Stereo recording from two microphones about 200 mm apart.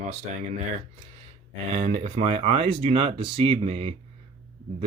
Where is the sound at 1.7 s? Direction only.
30° right (ahead or behind).